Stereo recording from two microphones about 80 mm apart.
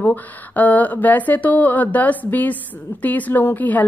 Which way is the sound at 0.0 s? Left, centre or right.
Left.